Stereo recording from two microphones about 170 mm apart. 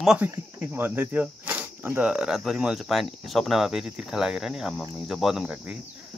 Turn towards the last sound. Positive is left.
turn(degrees=-5)  # may be behind; listen again after turning